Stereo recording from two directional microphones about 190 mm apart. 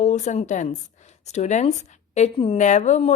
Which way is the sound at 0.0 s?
40° left (ahead or behind).